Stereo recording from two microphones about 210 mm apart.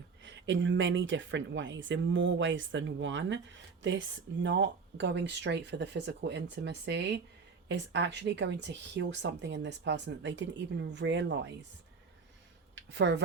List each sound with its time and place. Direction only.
0.2 s speech: 60° right (ahead or behind)
12.7 s speech: 55° right (ahead or behind)